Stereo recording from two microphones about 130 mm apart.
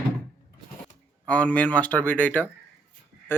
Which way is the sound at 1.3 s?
10° left (ahead or behind).